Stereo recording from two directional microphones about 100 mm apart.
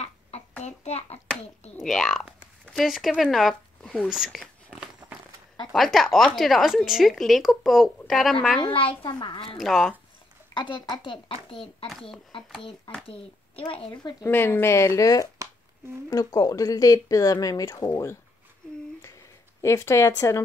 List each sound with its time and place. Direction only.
0.8 s a child's voice: 90° left
1.8 s speech: 5° left (ahead or behind)
4.1 s a sound: centre (ahead or behind)
5.7 s speech: centre (ahead or behind)
8.5 s a child's voice: 65° left (ahead or behind)
9.6 s speech: centre (ahead or behind)
10.5 s a child's voice: 50° left (ahead or behind); by 11.9 s 65° left (ahead or behind)
13.0 s speech: 65° left (ahead or behind)
14.2 s speech: 25° left (ahead or behind)
19.6 s speech: 25° left (ahead or behind)